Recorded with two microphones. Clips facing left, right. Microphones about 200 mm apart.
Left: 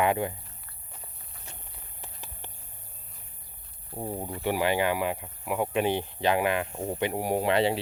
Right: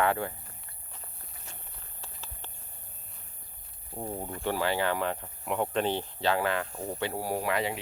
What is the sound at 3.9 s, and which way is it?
Speech, 10° left (ahead or behind).